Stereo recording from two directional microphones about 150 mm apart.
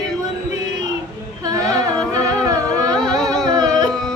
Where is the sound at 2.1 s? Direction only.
25° right (ahead or behind).